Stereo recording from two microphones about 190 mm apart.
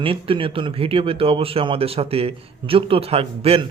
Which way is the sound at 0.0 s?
30° right (ahead or behind).